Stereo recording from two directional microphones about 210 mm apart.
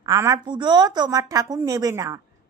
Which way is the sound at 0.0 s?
15° right (ahead or behind).